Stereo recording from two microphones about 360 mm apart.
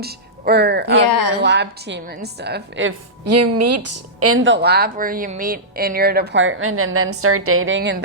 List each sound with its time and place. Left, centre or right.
0.0 s speech: right
1.0 s a woman's voice: left
1.4 s a woman's voice: right